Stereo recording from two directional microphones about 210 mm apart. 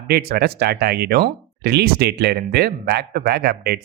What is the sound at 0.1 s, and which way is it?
Speech, 50° right (ahead or behind).